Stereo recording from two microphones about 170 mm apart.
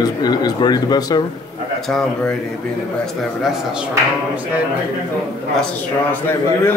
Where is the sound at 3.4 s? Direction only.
5° right (ahead or behind).